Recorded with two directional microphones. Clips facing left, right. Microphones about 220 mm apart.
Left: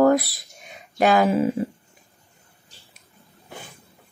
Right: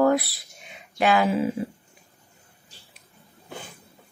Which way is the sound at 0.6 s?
45° left (ahead or behind).